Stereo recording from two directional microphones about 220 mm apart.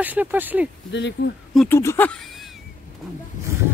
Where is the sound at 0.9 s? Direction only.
55° left (ahead or behind).